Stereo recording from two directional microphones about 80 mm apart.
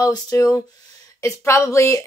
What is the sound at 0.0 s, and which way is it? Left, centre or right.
Speech, left.